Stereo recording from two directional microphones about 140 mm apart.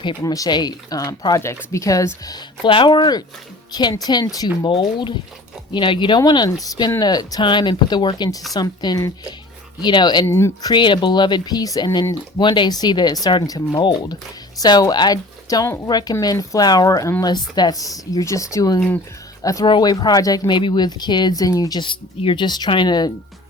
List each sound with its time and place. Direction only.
0.0 s speech: 30° left (ahead or behind)
10.2 s speech: 20° left (ahead or behind)
10.7 s speech: 35° left (ahead or behind)